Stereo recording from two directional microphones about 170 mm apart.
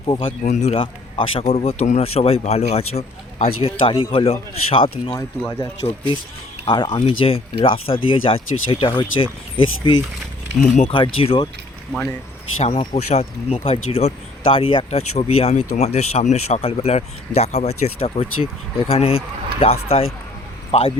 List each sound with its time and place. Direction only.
0.0 s a man's voice: 30° left (ahead or behind)
0.4 s a man's voice: 40° left (ahead or behind)
12.5 s speech: 35° left (ahead or behind)